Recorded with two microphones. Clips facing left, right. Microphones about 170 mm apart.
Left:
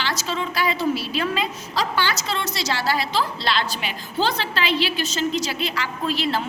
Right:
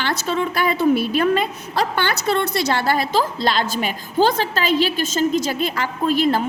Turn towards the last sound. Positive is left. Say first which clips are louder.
# right 6 dB
turn(degrees=-50)  # may be behind; listen again after turning